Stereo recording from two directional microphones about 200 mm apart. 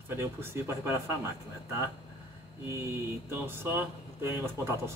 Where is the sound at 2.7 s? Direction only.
10° right (ahead or behind).